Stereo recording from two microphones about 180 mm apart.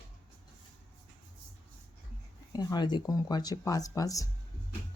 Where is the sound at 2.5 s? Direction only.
25° left (ahead or behind).